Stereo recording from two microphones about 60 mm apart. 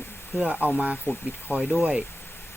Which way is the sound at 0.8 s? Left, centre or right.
Centre.